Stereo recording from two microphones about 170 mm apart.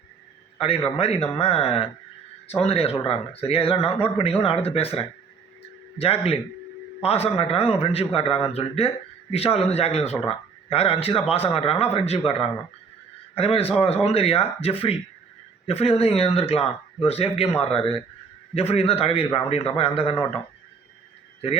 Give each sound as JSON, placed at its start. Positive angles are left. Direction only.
{"t": 0.9, "sound": "speech", "side_deg": 35}